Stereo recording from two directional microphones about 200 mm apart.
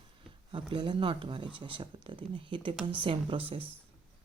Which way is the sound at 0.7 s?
25° right (ahead or behind).